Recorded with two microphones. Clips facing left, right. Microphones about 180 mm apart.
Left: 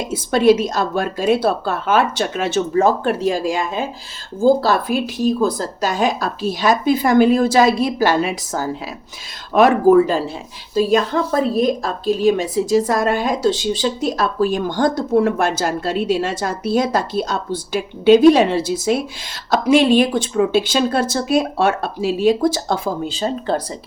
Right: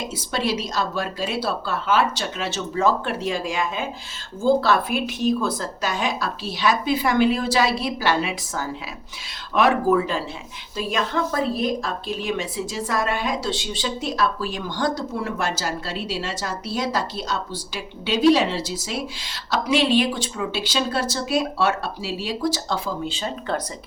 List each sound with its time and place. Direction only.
0.1 s a woman's voice: 50° left (ahead or behind); by 23.6 s 35° left (ahead or behind)